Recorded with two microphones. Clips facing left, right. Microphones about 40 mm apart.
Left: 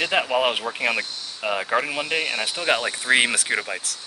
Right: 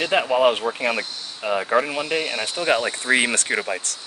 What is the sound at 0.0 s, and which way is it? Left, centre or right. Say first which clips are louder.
Speech: right 3 dB; centre.